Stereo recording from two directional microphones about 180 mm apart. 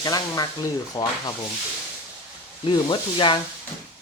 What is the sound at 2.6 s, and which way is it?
Speech, 25° left (ahead or behind).